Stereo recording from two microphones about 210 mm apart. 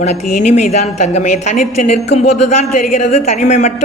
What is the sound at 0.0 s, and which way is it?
A woman's voice, 35° left (ahead or behind).